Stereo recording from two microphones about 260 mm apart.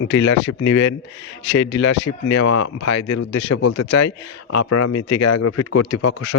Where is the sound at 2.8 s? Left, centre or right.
Left.